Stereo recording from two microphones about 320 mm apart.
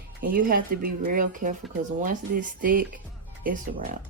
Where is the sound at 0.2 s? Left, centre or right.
Right.